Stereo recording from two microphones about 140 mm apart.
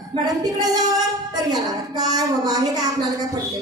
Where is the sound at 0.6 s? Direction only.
25° right (ahead or behind).